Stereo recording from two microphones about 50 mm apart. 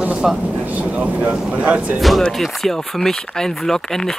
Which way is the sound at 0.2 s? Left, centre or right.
Centre.